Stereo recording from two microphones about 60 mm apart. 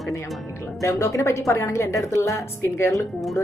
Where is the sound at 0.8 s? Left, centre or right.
Left.